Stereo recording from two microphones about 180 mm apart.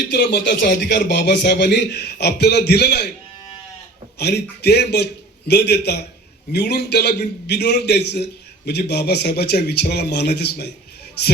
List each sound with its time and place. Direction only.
0.1 s speech: 70° left (ahead or behind)
4.2 s a man's voice: 65° left (ahead or behind)